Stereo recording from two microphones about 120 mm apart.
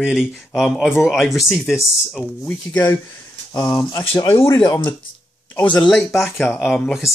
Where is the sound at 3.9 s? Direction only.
30° left (ahead or behind).